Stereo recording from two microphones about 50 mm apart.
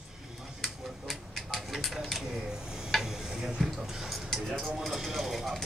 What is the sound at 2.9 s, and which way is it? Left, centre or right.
Tick-tock, centre.